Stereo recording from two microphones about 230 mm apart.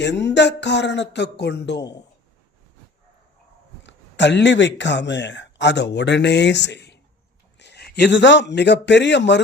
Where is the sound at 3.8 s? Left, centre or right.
Left.